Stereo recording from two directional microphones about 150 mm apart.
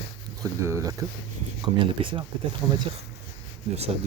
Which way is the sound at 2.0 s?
40° right (ahead or behind).